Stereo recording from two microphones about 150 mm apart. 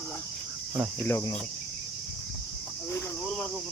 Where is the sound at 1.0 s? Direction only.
15° left (ahead or behind).